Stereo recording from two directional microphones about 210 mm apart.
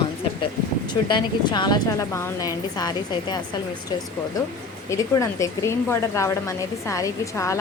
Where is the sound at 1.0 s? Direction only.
20° left (ahead or behind).